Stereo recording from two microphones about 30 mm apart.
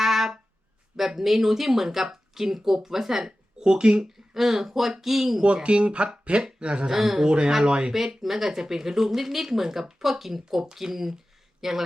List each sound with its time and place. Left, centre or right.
0.0 s music: centre
0.9 s speech: centre
3.6 s speech: right
4.0 s speech: centre
5.6 s speech: right
6.8 s speech: centre
7.3 s speech: right
8.2 s speech: centre